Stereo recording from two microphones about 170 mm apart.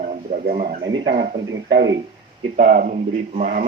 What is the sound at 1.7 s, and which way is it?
Speech, 90° right.